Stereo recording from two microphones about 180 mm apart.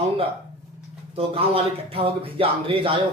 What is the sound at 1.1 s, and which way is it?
A man's voice, 30° right (ahead or behind).